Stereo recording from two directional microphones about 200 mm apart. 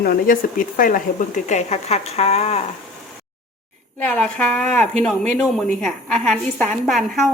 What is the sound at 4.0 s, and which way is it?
A woman's voice, 5° left (ahead or behind).